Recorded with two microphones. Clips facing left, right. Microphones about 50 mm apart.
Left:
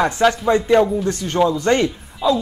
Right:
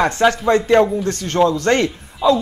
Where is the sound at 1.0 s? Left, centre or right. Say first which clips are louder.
Right 1 dB; centre.